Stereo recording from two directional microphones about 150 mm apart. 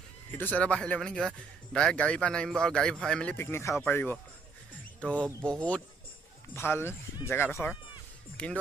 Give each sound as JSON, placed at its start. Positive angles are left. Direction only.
{"t": 0.3, "sound": "a man's voice", "side_deg": 10}